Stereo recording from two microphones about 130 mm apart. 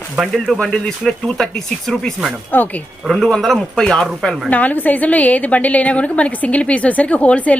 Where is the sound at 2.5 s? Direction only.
15° left (ahead or behind).